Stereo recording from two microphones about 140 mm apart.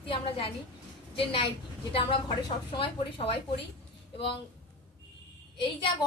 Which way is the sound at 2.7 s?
40° left (ahead or behind).